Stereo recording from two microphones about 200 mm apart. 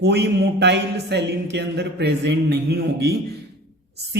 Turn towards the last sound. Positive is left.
turn(degrees=-55)  # may be behind; listen again after turning